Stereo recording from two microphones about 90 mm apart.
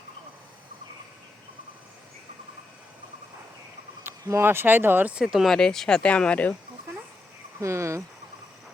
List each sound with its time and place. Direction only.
4.0 s speech: 25° right (ahead or behind)
5.2 s speech: 5° right (ahead or behind); by 6.5 s 15° left (ahead or behind)
7.6 s speech: 30° right (ahead or behind)